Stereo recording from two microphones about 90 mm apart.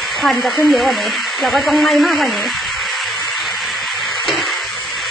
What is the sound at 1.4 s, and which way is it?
Speech, centre (ahead or behind).